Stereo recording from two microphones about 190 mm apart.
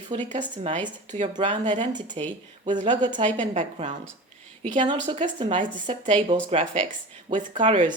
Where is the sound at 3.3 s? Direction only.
40° right (ahead or behind).